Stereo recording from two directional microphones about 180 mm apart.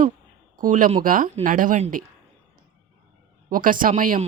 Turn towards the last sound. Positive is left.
turn(degrees=-50)  # may be behind; listen again after turning